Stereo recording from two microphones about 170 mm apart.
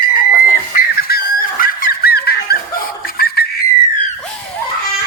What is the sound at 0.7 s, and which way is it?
Dog, 60° left (ahead or behind).